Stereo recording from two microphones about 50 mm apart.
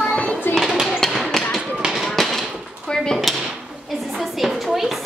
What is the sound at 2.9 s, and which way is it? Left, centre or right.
Drawer open or close, centre.